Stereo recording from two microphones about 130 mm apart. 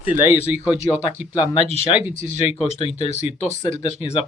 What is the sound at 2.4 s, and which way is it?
Speech, 50° left (ahead or behind).